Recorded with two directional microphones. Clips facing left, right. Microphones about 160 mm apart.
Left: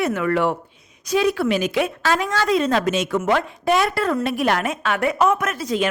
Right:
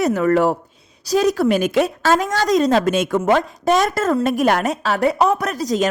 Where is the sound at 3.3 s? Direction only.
40° right (ahead or behind).